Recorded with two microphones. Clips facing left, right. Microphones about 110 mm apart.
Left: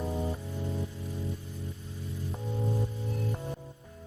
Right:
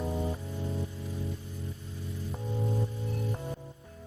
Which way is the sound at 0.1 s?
Centre (ahead or behind).